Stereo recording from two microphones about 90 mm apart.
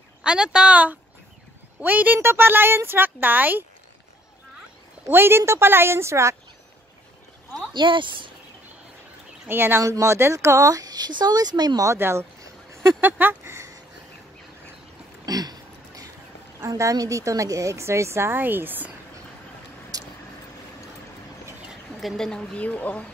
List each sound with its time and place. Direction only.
0.2 s a woman's voice: 10° right (ahead or behind)
5.0 s speech: 25° right (ahead or behind)
7.7 s speech: 65° right (ahead or behind)
9.5 s speech: 25° right (ahead or behind); by 11.8 s 50° right (ahead or behind)
11.8 s speech: 30° right (ahead or behind)
15.2 s a sound: 45° right (ahead or behind)
16.5 s a woman's voice: 35° right (ahead or behind)
19.9 s vehicle: 40° right (ahead or behind)
21.6 s speech: centre (ahead or behind)